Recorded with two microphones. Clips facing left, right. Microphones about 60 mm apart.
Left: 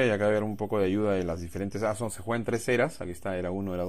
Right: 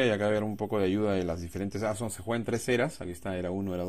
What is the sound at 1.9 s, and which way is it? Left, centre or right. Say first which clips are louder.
Speech: left 2 dB; centre.